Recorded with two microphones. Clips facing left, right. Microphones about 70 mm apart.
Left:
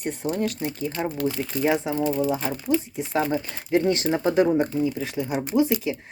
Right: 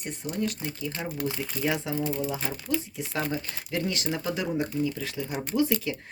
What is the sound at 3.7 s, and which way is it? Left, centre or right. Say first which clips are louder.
Speech: left 9 dB; left.